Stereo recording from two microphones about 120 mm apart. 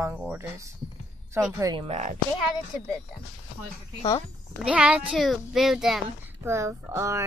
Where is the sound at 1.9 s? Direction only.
75° right (ahead or behind).